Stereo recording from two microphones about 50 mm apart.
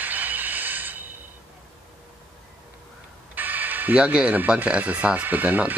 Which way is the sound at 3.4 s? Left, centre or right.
Right.